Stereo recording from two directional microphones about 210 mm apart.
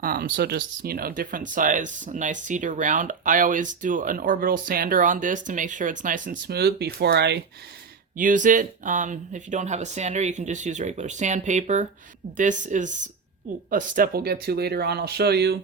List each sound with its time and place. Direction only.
0.0 s speech: 45° right (ahead or behind)
8.1 s speech: 40° right (ahead or behind)